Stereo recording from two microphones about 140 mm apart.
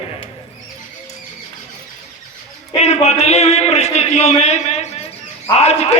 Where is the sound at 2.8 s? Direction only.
50° left (ahead or behind).